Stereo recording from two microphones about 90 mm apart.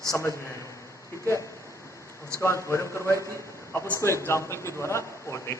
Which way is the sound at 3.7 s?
20° left (ahead or behind).